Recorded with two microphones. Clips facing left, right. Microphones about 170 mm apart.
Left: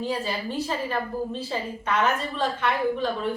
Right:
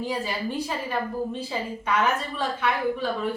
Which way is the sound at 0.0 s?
10° right (ahead or behind).